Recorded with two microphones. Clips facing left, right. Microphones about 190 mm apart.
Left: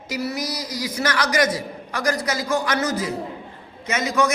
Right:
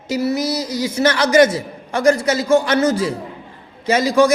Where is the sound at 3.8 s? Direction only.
30° right (ahead or behind).